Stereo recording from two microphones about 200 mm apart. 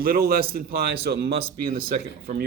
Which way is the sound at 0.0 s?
50° right (ahead or behind).